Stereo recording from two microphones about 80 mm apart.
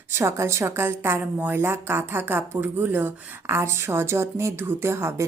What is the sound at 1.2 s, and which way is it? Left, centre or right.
A woman's voice, right.